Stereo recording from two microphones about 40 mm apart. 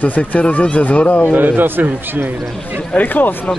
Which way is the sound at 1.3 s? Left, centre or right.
Right.